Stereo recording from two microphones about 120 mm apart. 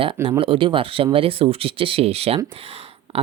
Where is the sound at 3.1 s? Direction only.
50° right (ahead or behind).